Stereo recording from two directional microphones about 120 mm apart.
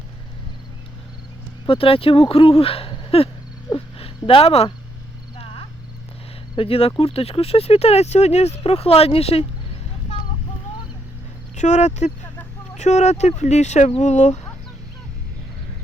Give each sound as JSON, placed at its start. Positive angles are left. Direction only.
{"t": 1.6, "sound": "speech", "side_deg": 50}
{"t": 3.8, "sound": "a sound", "side_deg": 50}
{"t": 6.6, "sound": "speech", "side_deg": 55}
{"t": 11.5, "sound": "speech", "side_deg": 75}